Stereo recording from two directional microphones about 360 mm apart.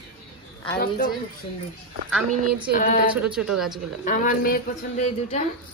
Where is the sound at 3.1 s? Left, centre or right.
Centre.